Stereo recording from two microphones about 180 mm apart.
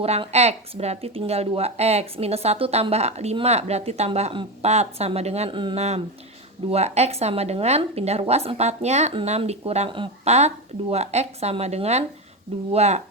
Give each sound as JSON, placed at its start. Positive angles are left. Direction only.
{"t": 0.0, "sound": "speech", "side_deg": -35}